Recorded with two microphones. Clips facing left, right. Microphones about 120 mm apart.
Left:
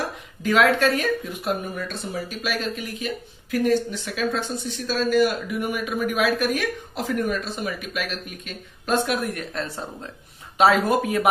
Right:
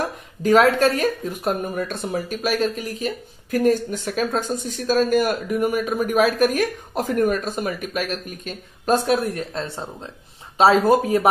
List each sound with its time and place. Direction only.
0.4 s speech: 40° right (ahead or behind)